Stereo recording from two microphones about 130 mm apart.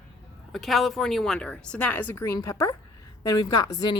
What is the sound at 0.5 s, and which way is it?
A woman's voice, centre (ahead or behind).